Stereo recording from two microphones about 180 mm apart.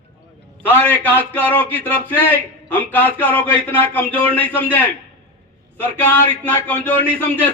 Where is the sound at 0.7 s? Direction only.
10° left (ahead or behind).